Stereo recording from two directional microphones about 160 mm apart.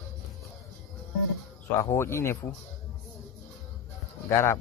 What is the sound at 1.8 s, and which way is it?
Speech, 15° left (ahead or behind).